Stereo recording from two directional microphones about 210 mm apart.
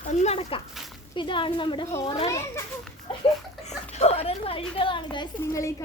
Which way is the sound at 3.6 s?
30° left (ahead or behind).